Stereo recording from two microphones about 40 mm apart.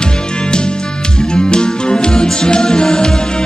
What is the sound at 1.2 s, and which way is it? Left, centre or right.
Music, left.